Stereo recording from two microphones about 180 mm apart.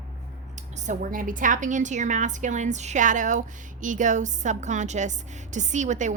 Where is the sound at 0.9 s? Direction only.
50° right (ahead or behind).